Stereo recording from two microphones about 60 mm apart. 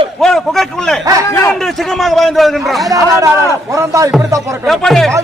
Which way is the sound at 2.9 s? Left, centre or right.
Right.